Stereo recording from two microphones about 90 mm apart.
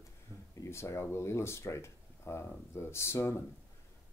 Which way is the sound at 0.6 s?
30° left (ahead or behind).